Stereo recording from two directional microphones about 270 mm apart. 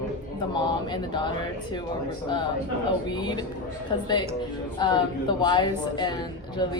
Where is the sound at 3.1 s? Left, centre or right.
Centre.